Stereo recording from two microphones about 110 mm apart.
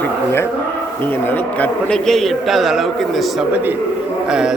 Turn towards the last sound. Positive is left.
turn(degrees=-5)  # may be behind; listen again after turning